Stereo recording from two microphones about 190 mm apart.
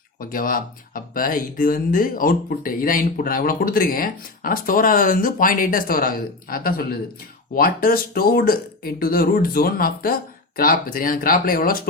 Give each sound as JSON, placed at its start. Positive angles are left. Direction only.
{"t": 0.2, "sound": "speech", "side_deg": 45}